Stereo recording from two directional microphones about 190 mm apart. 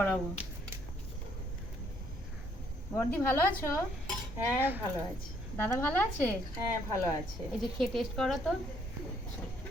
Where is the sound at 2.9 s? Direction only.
10° left (ahead or behind).